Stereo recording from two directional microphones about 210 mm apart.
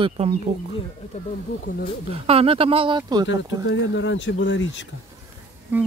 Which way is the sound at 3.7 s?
65° left (ahead or behind).